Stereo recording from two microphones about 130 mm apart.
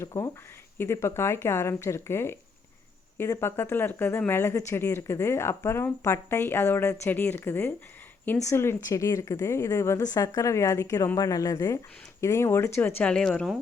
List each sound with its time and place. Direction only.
0.0 s a woman's voice: 20° left (ahead or behind); by 13.6 s 5° left (ahead or behind)